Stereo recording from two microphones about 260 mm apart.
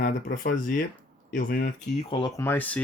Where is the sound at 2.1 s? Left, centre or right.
Centre.